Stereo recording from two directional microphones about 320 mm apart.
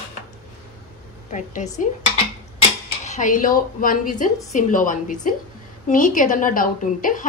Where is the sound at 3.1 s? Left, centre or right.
Left.